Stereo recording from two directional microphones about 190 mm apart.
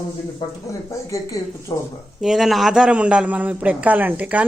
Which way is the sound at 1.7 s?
20° left (ahead or behind).